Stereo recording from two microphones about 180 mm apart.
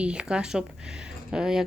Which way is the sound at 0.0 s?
5° right (ahead or behind).